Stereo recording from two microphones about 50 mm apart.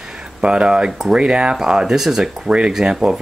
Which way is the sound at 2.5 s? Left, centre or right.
Right.